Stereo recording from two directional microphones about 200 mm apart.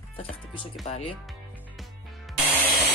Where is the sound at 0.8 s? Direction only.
30° left (ahead or behind).